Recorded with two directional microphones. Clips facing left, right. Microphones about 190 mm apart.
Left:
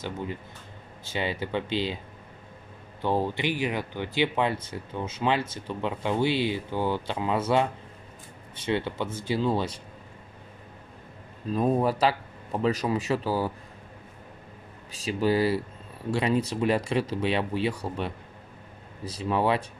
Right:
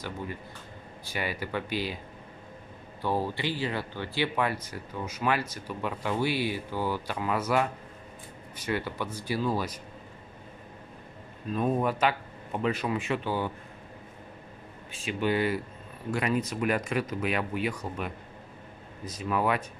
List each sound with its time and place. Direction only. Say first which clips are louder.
1.0 s speech: left 3 dB; 25° left (ahead or behind)
3.0 s speech: left 3 dB; 20° left (ahead or behind)
11.5 s speech: left 3 dB; 35° left (ahead or behind)
14.9 s speech: left 3 dB; 35° left (ahead or behind)